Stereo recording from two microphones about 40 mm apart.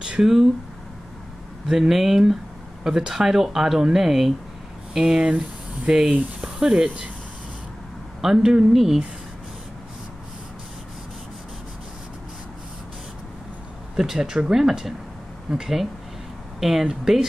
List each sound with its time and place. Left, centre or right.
0.2 s speech: centre
1.7 s speech: centre
4.9 s speech: centre
8.2 s speech: centre
14.1 s speech: centre